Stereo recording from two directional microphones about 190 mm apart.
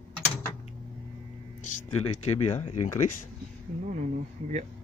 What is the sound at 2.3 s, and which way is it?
Speech, 35° left (ahead or behind).